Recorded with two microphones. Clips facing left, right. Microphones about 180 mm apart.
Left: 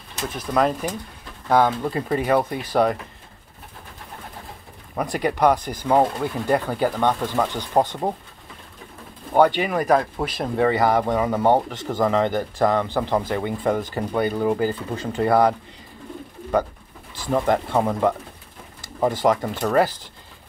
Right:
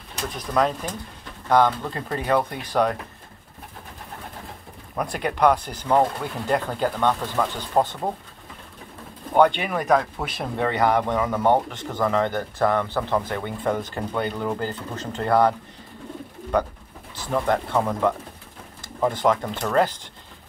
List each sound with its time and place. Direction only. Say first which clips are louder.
0.3 s speech: left 2 dB; 5° left (ahead or behind)
5.1 s speech: left 1 dB; 10° left (ahead or behind)
9.3 s speech: left 1 dB; 10° left (ahead or behind)
17.1 s speech: left 2 dB; 15° left (ahead or behind)